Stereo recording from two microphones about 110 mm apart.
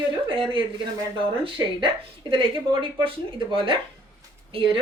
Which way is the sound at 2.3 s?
50° right (ahead or behind).